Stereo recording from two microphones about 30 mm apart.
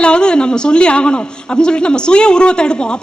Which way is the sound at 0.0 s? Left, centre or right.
Left.